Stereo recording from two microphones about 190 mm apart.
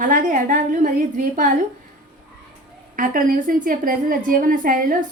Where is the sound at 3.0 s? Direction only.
45° right (ahead or behind).